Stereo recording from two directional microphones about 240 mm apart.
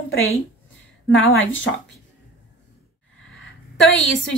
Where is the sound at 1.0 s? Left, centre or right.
Left.